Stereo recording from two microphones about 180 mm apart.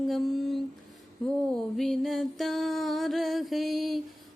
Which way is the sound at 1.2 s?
5° left (ahead or behind).